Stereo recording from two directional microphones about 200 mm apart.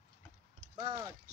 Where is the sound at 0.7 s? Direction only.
20° right (ahead or behind).